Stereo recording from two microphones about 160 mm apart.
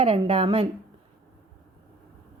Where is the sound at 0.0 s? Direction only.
35° right (ahead or behind).